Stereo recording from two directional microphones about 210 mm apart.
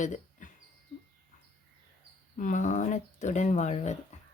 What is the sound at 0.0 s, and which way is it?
Bird, 35° left (ahead or behind).